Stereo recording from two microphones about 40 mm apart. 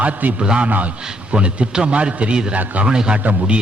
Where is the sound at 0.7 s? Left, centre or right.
Right.